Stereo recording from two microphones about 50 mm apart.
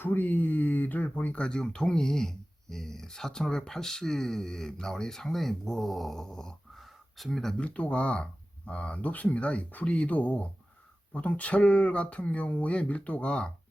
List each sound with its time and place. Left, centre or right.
0.0 s speech: left
1.4 s speech: centre
7.5 s speech: left